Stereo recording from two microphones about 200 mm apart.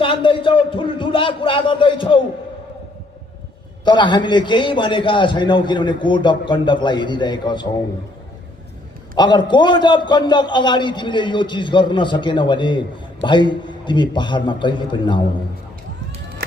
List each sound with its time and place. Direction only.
0.0 s a sound: 25° left (ahead or behind)
3.8 s a man's voice: 20° left (ahead or behind)
9.1 s a man's voice: 20° left (ahead or behind)